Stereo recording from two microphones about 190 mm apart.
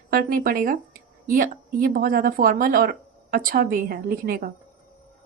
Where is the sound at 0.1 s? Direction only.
50° right (ahead or behind).